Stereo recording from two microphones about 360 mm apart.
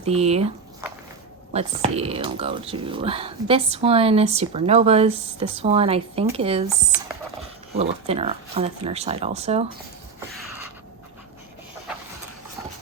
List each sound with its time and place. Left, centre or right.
0.0 s speech: centre
7.8 s speech: centre